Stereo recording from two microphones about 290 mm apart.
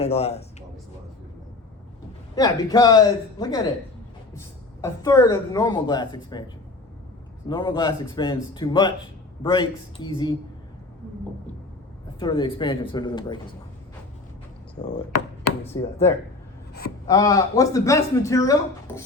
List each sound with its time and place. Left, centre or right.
0.0 s speech: left
2.3 s speech: centre
12.2 s speech: centre
14.8 s speech: left
17.1 s speech: centre